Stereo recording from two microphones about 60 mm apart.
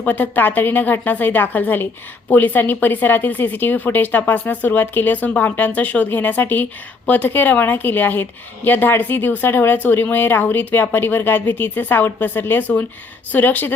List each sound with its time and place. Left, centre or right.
0.0 s a woman's voice: left